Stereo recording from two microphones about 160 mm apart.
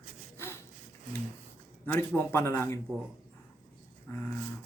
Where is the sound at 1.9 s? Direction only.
15° left (ahead or behind).